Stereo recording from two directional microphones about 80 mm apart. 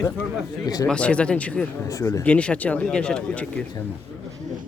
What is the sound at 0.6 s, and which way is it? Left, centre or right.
Speech, left.